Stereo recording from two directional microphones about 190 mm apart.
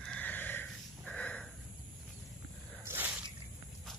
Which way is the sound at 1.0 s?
5° left (ahead or behind).